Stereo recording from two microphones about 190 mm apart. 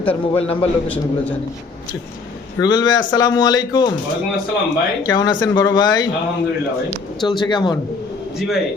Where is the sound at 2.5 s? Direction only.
20° left (ahead or behind).